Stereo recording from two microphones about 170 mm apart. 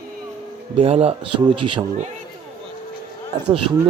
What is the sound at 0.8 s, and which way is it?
Speech, 35° right (ahead or behind).